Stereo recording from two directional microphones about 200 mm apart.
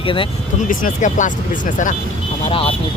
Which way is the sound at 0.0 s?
25° left (ahead or behind).